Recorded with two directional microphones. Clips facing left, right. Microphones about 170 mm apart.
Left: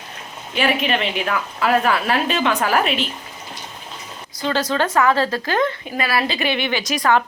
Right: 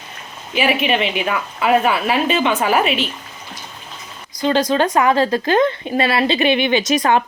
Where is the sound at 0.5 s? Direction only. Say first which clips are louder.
Right 2 dB; 5° right (ahead or behind).